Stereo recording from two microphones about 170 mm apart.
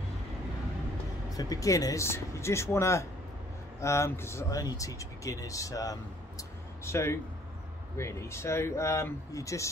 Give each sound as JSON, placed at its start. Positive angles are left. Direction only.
{"t": 1.3, "sound": "speech", "side_deg": 20}